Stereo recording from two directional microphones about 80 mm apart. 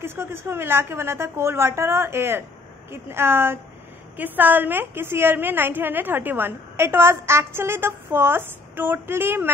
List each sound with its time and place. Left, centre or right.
0.0 s a woman's voice: right